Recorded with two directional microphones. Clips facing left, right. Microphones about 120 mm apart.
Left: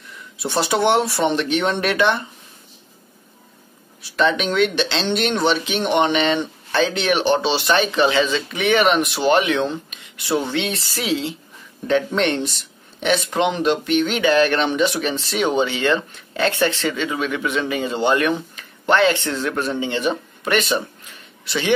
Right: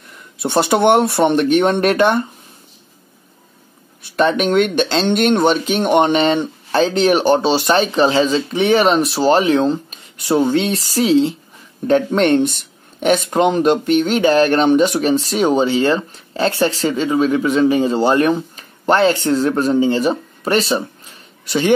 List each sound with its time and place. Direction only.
0.0 s speech: 50° right (ahead or behind)
4.0 s speech: 50° right (ahead or behind)